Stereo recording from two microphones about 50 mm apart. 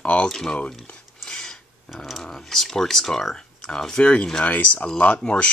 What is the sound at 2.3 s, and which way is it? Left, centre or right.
Speech, centre.